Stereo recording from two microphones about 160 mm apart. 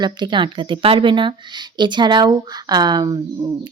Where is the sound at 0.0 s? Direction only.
30° right (ahead or behind).